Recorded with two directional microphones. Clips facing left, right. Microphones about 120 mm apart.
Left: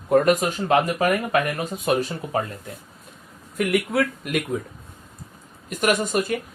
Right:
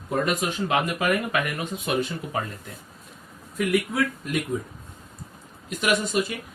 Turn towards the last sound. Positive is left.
turn(degrees=50)  # may be behind; listen again after turning